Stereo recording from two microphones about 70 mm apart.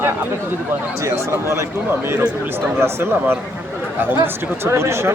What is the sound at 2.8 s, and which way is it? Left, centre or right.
Speech, right.